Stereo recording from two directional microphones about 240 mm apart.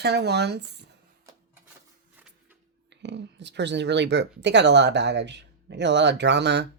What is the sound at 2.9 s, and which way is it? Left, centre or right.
Speech, right.